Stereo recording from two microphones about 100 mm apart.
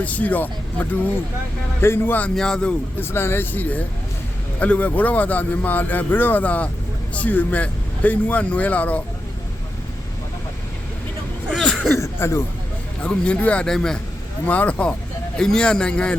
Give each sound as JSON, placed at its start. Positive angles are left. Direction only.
{"t": 0.0, "sound": "speech", "side_deg": 15}
{"t": 2.3, "sound": "speech", "side_deg": 5}
{"t": 3.0, "sound": "speech", "side_deg": 25}
{"t": 11.4, "sound": "a sound", "side_deg": 5}
{"t": 11.9, "sound": "speech", "side_deg": 30}
{"t": 13.0, "sound": "speech", "side_deg": 10}